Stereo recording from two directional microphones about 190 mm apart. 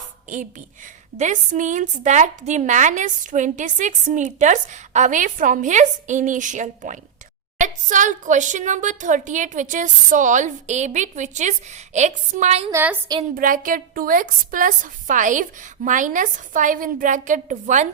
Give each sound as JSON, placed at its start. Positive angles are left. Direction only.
{"t": 1.1, "sound": "a woman's voice", "side_deg": -40}
{"t": 12.7, "sound": "a woman's voice", "side_deg": -10}
{"t": 13.3, "sound": "a woman's voice", "side_deg": -45}